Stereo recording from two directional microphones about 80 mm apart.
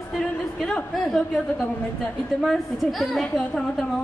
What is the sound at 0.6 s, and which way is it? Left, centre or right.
A woman's voice, centre.